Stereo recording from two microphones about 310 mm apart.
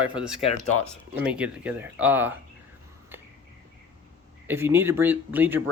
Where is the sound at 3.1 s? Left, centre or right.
Centre.